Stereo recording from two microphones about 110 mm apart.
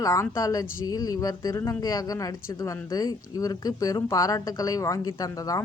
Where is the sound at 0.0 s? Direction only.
30° left (ahead or behind).